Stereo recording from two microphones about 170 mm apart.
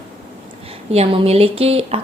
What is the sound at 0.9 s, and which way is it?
A woman's voice, 35° right (ahead or behind).